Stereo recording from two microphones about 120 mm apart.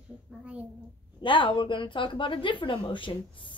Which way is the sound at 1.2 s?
45° left (ahead or behind).